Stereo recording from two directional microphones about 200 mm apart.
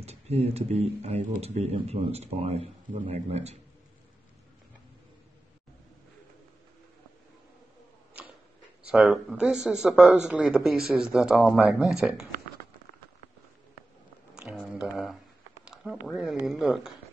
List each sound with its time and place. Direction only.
0.0 s speech: 30° right (ahead or behind)
8.9 s speech: 5° right (ahead or behind)
14.3 s a sound: centre (ahead or behind)
15.6 s speech: 5° right (ahead or behind)